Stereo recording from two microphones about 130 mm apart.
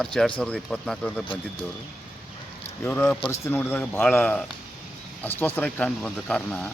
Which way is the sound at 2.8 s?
15° left (ahead or behind).